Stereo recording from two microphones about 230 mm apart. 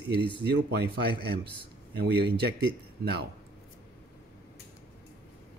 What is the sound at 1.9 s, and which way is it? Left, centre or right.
Speech, right.